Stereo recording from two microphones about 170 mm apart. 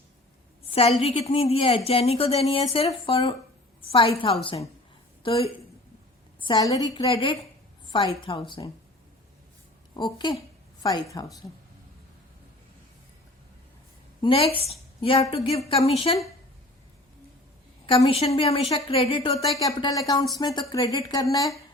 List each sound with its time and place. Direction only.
0.7 s a woman's voice: 35° left (ahead or behind)
9.9 s a woman's voice: 25° left (ahead or behind)
14.2 s a woman's voice: 30° left (ahead or behind)
17.9 s a woman's voice: 35° left (ahead or behind)
19.6 s a woman's voice: 20° left (ahead or behind)